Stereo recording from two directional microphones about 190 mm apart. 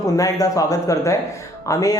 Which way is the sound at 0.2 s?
20° left (ahead or behind).